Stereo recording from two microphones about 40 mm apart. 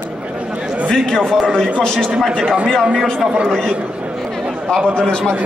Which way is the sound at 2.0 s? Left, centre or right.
Centre.